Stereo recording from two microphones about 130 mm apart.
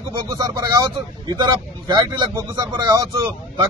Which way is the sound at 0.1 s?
30° right (ahead or behind).